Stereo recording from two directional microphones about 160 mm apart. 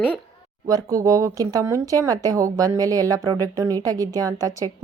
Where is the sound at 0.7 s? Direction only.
20° right (ahead or behind).